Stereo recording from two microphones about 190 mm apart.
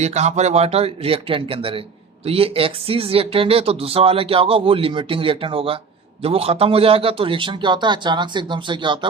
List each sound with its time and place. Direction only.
0.0 s speech: 35° right (ahead or behind)